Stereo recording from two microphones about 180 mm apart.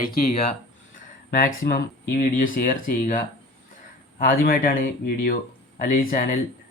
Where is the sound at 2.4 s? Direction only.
50° left (ahead or behind).